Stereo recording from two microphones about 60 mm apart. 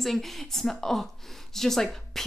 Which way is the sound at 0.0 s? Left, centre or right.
Centre.